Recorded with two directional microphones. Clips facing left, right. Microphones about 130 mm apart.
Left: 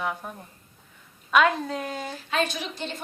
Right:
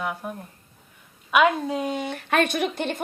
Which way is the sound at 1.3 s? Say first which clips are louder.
Right 2 dB; 10° right (ahead or behind).